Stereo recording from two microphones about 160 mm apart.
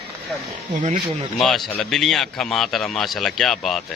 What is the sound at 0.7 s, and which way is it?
Speech, 50° right (ahead or behind).